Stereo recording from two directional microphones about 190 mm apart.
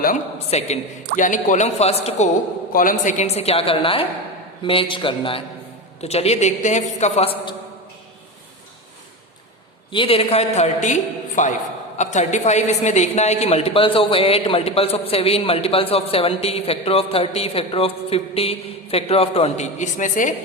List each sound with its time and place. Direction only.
0.0 s a woman's voice: 40° left (ahead or behind)
2.7 s a woman's voice: 45° left (ahead or behind)
9.9 s a woman's voice: 30° left (ahead or behind)